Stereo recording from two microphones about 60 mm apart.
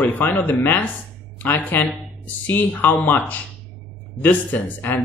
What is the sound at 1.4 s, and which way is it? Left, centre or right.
Speech, left.